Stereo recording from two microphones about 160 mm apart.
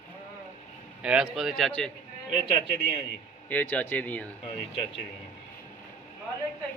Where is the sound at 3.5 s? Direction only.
10° left (ahead or behind).